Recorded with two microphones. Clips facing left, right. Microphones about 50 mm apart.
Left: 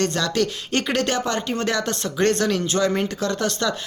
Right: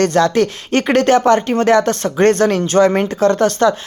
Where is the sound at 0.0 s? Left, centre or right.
Right.